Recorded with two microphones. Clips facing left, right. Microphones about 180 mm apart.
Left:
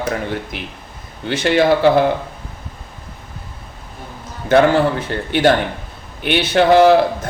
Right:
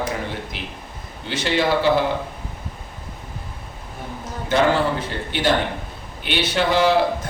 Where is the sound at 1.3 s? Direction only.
60° left (ahead or behind).